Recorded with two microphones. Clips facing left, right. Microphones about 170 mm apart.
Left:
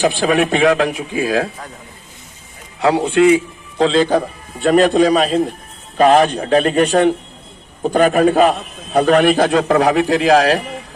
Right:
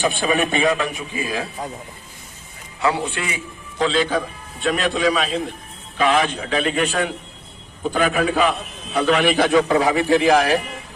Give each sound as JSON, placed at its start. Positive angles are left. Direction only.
{"t": 0.0, "sound": "a man's voice", "side_deg": 85}
{"t": 2.8, "sound": "a man's voice", "side_deg": 70}
{"t": 3.8, "sound": "a man's voice", "side_deg": 40}
{"t": 9.5, "sound": "a man's voice", "side_deg": 70}